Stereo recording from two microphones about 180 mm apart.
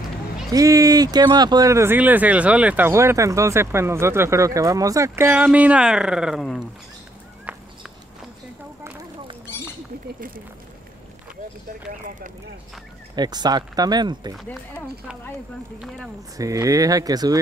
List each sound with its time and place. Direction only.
0.5 s speech: 20° right (ahead or behind); by 6.6 s centre (ahead or behind)
7.5 s a sound: 10° right (ahead or behind)
13.1 s speech: 25° right (ahead or behind)
14.3 s speech: 5° left (ahead or behind)
16.3 s speech: 20° right (ahead or behind)